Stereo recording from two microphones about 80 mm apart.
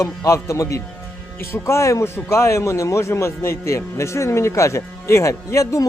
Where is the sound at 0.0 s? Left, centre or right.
Left.